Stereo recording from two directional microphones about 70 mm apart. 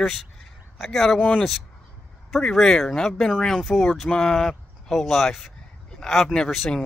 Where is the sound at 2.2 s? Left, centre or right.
Centre.